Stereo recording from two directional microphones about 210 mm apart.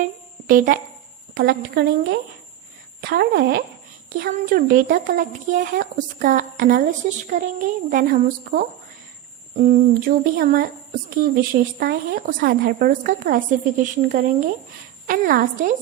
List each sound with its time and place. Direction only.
0.0 s music: 40° right (ahead or behind)
1.3 s humming: 50° right (ahead or behind)
4.2 s a woman's voice: 45° right (ahead or behind)
9.6 s humming: 40° right (ahead or behind)
11.1 s a woman's voice: 40° right (ahead or behind)